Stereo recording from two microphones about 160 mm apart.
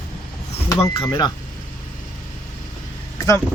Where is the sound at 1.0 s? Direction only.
25° left (ahead or behind).